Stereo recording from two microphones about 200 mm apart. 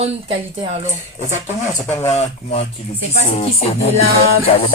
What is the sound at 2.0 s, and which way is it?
A man's voice, 30° left (ahead or behind).